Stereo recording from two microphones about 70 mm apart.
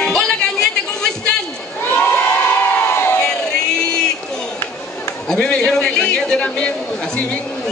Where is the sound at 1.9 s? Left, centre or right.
Left.